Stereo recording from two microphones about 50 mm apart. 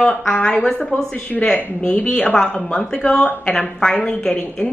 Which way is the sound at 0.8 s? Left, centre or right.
Centre.